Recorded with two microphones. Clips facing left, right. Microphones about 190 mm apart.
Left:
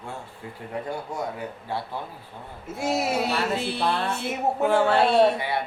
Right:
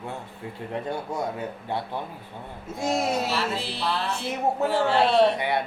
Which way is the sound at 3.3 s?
55° left (ahead or behind).